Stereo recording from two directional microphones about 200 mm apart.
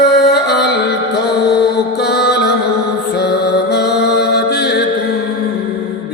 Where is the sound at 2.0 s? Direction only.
55° left (ahead or behind).